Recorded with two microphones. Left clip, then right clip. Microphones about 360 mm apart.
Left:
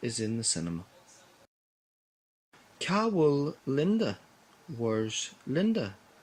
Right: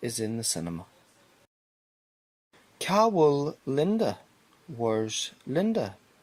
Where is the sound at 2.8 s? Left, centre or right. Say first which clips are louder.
Right 5 dB; centre.